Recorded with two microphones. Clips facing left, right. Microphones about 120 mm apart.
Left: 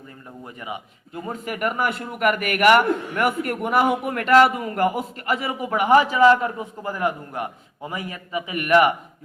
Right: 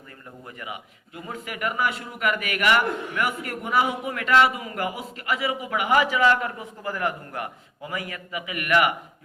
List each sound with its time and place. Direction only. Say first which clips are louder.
1.1 s a man's voice: left 5 dB; 40° left (ahead or behind)